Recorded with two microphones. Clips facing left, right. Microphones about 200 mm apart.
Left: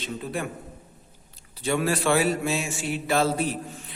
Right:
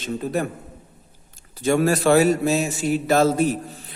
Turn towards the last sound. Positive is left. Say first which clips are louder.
# right 6 dB
turn(degrees=-45)  # may be behind; listen again after turning